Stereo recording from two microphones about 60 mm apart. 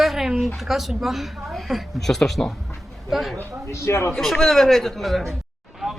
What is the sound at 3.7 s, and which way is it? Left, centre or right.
Speech, left.